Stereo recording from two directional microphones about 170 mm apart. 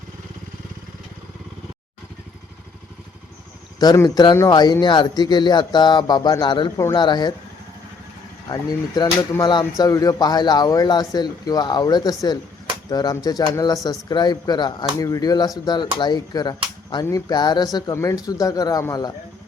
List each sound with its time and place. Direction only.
3.8 s speech: 20° left (ahead or behind)
8.4 s speech: 20° left (ahead or behind)